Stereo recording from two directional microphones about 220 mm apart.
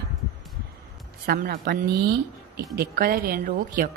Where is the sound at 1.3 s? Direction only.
40° right (ahead or behind).